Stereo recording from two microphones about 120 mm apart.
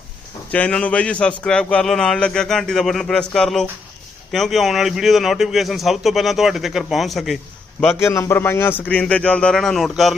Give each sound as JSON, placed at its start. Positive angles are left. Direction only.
{"t": 0.5, "sound": "speech", "side_deg": 10}
{"t": 7.9, "sound": "a man's voice", "side_deg": 25}